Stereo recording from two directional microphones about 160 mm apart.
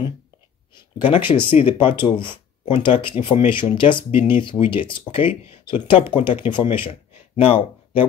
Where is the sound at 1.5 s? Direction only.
45° left (ahead or behind).